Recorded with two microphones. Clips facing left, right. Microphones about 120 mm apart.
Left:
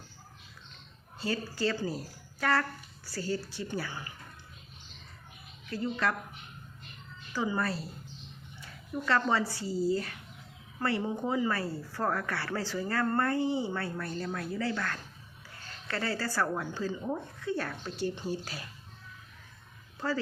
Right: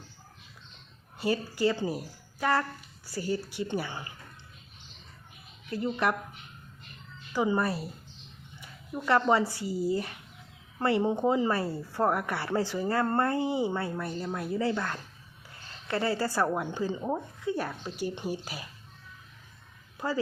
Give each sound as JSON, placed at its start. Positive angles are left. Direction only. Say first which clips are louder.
{"t": 1.2, "sound": "speech", "louder": "right 4 dB", "side_deg": -20}
{"t": 5.7, "sound": "speech", "louder": "right 3 dB", "side_deg": -20}
{"t": 7.3, "sound": "speech", "louder": "right 4 dB", "side_deg": -20}
{"t": 8.9, "sound": "speech", "louder": "right 4 dB", "side_deg": -20}